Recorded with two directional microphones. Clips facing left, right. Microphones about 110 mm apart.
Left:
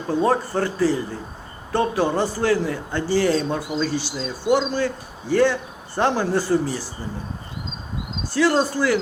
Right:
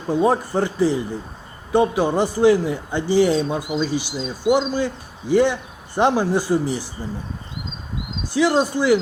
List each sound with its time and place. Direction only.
0.1 s a man's voice: 15° right (ahead or behind)
8.3 s a man's voice: 15° right (ahead or behind)